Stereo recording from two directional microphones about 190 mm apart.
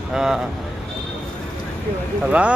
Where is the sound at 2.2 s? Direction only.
5° right (ahead or behind).